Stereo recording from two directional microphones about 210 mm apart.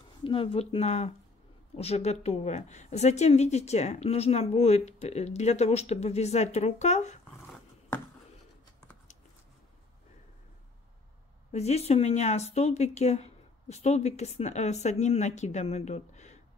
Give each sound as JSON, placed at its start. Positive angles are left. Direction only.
{"t": 0.2, "sound": "a woman's voice", "side_deg": 25}
{"t": 7.2, "sound": "dog", "side_deg": 0}
{"t": 11.5, "sound": "a woman's voice", "side_deg": 30}